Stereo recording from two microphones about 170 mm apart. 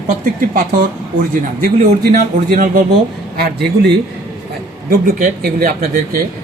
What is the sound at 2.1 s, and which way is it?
Speech, 50° right (ahead or behind).